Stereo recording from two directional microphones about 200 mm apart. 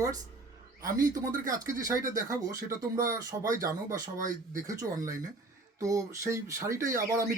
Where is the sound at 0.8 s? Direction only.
20° right (ahead or behind).